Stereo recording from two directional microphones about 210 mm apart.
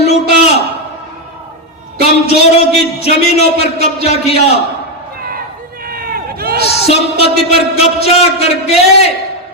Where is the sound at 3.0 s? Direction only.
30° left (ahead or behind).